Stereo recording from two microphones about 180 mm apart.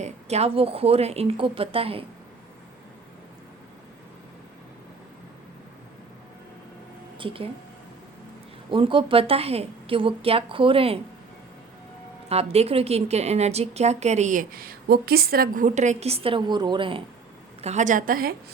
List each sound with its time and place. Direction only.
0.0 s a woman's voice: 35° right (ahead or behind)
7.2 s speech: 30° right (ahead or behind)
8.7 s a woman's voice: 30° right (ahead or behind)
12.3 s a woman's voice: 35° right (ahead or behind)
17.6 s a woman's voice: 40° right (ahead or behind)